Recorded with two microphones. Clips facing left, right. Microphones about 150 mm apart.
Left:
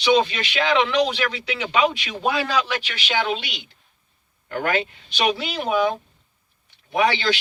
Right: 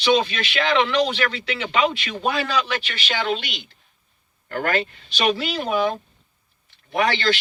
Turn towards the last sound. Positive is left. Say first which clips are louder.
# left 1 dB
turn(degrees=10)  # may be behind; listen again after turning